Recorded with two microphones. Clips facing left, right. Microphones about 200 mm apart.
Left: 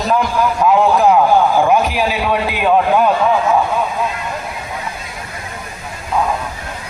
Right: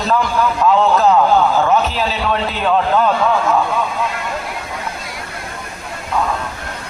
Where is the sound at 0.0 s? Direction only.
15° left (ahead or behind).